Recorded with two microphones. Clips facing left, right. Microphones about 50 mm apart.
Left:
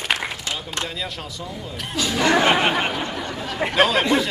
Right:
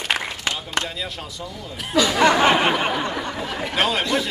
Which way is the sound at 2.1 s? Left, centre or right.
Centre.